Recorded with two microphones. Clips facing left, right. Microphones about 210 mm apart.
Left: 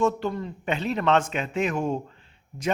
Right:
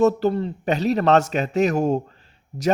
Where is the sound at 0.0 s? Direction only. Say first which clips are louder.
Right 7 dB; 40° right (ahead or behind).